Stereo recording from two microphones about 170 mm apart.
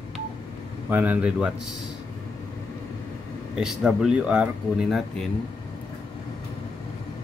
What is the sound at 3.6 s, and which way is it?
Speech, 5° right (ahead or behind).